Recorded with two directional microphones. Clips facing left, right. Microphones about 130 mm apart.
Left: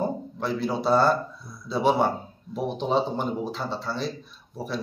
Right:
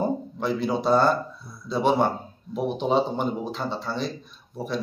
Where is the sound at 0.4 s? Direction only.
Centre (ahead or behind).